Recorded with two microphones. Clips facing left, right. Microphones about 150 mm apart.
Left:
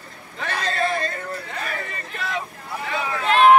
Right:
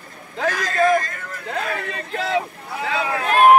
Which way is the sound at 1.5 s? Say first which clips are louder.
Right 5 dB; 90° right.